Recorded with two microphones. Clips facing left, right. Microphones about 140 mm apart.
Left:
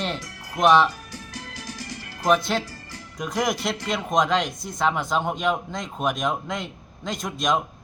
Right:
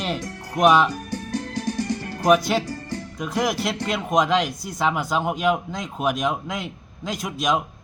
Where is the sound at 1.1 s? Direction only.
50° right (ahead or behind).